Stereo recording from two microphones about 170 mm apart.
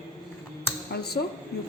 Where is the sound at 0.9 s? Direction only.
70° left (ahead or behind).